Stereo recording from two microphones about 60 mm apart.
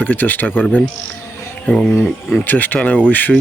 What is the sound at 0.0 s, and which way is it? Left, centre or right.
Speech, left.